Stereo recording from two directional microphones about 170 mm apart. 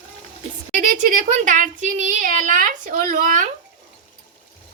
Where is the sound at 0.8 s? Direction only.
50° right (ahead or behind).